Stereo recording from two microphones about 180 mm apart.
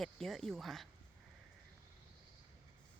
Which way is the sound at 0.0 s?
Centre (ahead or behind).